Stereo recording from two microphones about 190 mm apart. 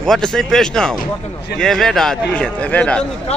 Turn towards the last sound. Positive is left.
turn(degrees=5)  # may be behind; listen again after turning